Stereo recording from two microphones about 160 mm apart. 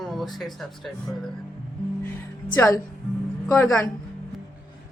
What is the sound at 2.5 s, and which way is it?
Speech, 15° left (ahead or behind).